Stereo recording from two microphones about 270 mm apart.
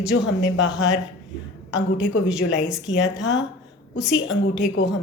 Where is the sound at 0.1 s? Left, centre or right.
Left.